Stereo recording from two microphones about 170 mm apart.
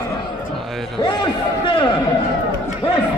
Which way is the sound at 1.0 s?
30° left (ahead or behind).